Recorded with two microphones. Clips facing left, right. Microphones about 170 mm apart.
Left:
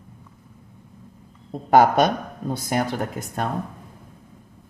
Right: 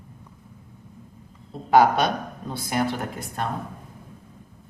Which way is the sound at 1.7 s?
45° left (ahead or behind).